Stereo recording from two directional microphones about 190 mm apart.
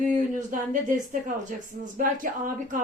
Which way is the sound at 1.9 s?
45° right (ahead or behind).